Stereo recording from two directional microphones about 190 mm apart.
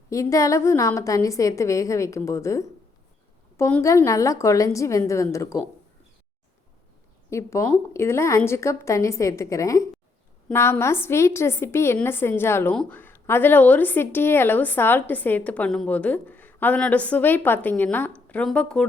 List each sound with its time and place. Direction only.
0.1 s a woman's voice: 15° left (ahead or behind)
7.3 s a woman's voice: 15° left (ahead or behind)